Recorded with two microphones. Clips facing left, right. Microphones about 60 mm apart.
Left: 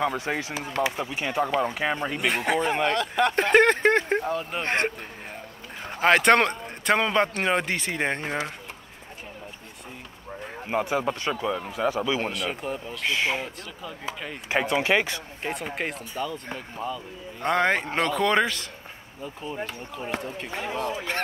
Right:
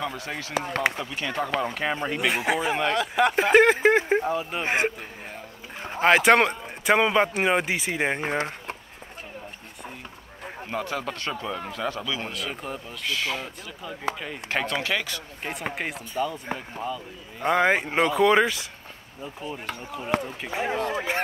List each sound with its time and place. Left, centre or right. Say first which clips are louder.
0.0 s speech: left 5 dB; left
0.6 s speech: right 6 dB; right
0.9 s speech: left 2 dB; left
1.6 s speech: left 1 dB; centre
8.4 s a sound: right 2 dB; right
10.7 s speech: left 5 dB; centre
11.4 s speech: left 3 dB; centre
12.0 s speech: left 5 dB; left
12.6 s speech: left 3 dB; centre
13.0 s speech: left 3 dB; left
14.5 s speech: left 4 dB; centre
15.7 s speech: even; centre
20.6 s speech: right 3 dB; right